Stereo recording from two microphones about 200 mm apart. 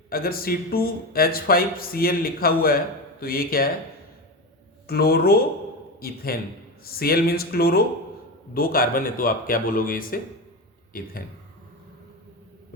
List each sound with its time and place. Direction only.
0.1 s speech: 45° left (ahead or behind)
4.9 s speech: 50° left (ahead or behind)